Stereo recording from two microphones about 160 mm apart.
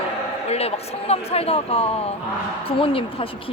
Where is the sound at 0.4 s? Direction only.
40° left (ahead or behind).